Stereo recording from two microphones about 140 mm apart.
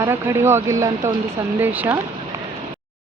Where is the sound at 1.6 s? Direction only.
15° right (ahead or behind).